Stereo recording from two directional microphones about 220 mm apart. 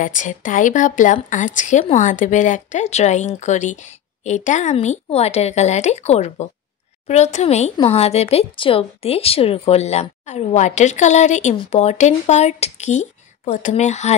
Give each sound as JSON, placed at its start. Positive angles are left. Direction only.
{"t": 0.0, "sound": "speech", "side_deg": 35}